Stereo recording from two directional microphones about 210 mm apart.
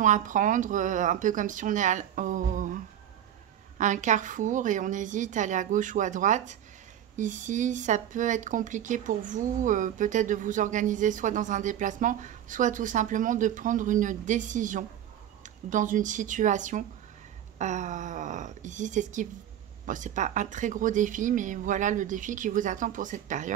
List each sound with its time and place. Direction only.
0.0 s speech: 35° right (ahead or behind)